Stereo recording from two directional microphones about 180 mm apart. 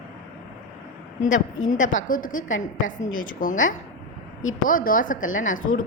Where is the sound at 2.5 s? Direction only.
90° left.